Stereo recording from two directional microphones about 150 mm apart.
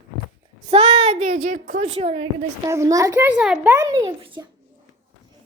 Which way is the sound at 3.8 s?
20° right (ahead or behind).